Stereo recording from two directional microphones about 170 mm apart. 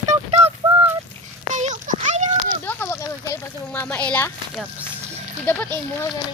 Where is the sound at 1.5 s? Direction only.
45° right (ahead or behind).